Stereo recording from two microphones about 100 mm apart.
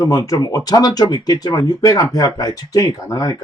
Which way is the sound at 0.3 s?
35° left (ahead or behind).